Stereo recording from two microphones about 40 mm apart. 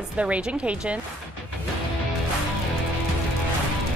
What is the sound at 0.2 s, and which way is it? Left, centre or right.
Speech, right.